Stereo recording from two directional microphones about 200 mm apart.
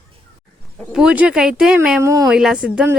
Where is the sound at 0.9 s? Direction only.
5° right (ahead or behind).